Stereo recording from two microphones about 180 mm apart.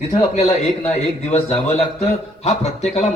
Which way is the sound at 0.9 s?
40° left (ahead or behind).